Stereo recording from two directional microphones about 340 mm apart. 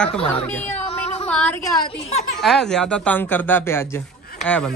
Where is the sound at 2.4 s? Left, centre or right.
Centre.